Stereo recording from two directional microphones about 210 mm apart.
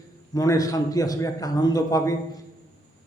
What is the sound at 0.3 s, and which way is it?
A man's voice, 15° left (ahead or behind).